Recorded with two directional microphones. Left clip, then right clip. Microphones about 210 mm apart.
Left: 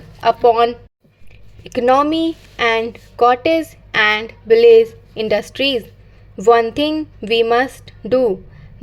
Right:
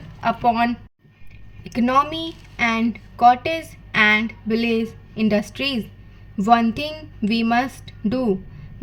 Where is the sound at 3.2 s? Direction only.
30° left (ahead or behind).